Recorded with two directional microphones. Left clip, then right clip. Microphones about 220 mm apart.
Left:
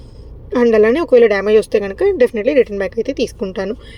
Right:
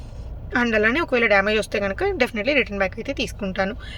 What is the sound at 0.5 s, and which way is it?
Speech, 15° left (ahead or behind).